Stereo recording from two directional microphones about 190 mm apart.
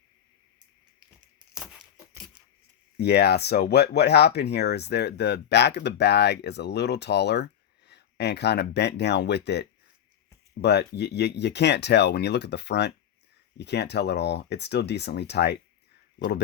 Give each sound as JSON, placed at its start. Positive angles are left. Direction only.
{"t": 3.0, "sound": "speech", "side_deg": 60}